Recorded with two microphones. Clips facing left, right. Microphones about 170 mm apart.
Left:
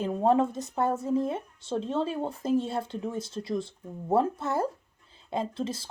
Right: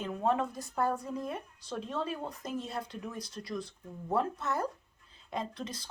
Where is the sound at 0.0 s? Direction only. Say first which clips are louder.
Left 7 dB; 30° left (ahead or behind).